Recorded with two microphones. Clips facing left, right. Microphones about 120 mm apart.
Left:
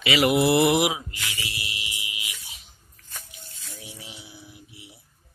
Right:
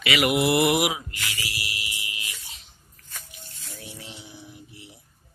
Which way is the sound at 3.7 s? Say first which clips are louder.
Right 2 dB; 10° left (ahead or behind).